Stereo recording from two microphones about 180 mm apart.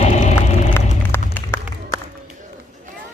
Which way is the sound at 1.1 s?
15° left (ahead or behind).